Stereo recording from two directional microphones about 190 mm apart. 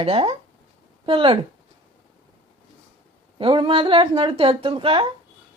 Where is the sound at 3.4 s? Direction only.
30° right (ahead or behind).